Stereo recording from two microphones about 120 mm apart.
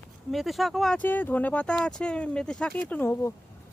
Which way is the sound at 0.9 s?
15° left (ahead or behind).